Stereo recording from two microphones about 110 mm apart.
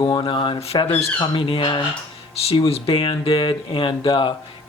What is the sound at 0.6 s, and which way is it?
Speech, 60° left (ahead or behind).